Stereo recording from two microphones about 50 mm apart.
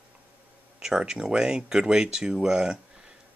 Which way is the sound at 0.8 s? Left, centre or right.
Centre.